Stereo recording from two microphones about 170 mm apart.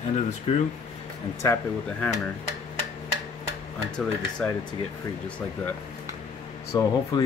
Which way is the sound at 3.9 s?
5° left (ahead or behind).